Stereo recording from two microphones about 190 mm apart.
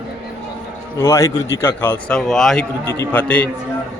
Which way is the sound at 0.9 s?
15° left (ahead or behind).